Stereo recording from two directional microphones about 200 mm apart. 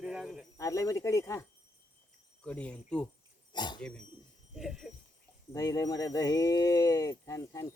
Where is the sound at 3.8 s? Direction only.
5° left (ahead or behind).